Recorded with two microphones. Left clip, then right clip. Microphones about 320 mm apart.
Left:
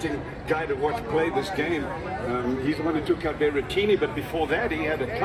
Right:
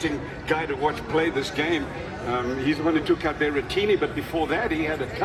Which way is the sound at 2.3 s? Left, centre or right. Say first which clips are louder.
Right 3 dB; centre.